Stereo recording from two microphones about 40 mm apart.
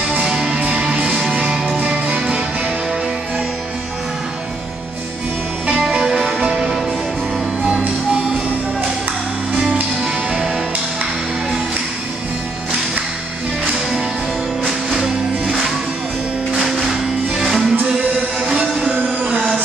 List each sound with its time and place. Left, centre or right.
0.2 s music: centre
1.8 s music: right
5.9 s music: centre
7.6 s music: right
10.0 s music: centre
14.7 s music: centre
16.8 s music: centre
17.8 s music: right
18.9 s music: right